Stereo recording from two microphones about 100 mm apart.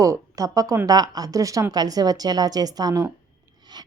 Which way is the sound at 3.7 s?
45° right (ahead or behind).